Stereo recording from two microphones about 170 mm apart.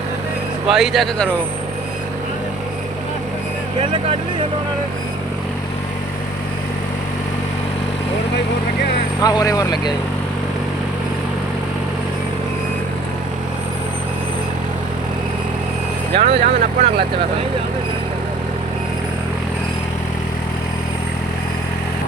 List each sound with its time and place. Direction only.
0.7 s speech: centre (ahead or behind)
3.8 s speech: 30° right (ahead or behind)
9.2 s speech: 20° left (ahead or behind)
16.1 s speech: 35° right (ahead or behind)